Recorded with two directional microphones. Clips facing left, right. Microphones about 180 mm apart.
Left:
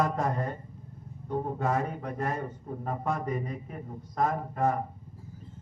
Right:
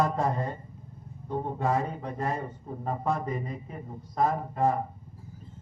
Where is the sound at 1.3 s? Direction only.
30° right (ahead or behind).